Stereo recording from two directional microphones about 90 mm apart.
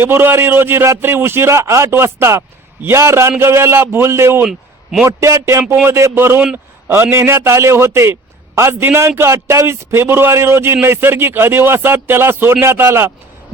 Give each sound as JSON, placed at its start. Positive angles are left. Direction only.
{"t": 0.0, "sound": "a man's voice", "side_deg": -25}
{"t": 4.4, "sound": "a sound", "side_deg": -5}
{"t": 5.0, "sound": "a man's voice", "side_deg": -35}